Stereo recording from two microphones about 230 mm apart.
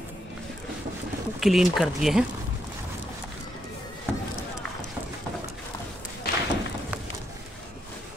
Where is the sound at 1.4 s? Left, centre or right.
Centre.